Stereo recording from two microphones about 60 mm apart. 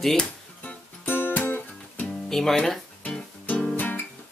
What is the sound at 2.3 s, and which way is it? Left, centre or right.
Speech, centre.